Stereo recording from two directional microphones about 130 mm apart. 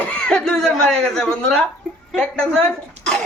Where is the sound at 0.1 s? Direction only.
10° left (ahead or behind).